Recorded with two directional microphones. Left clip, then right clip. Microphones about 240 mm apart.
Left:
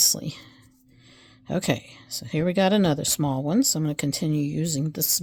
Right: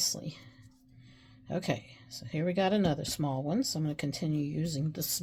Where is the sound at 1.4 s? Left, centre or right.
Left.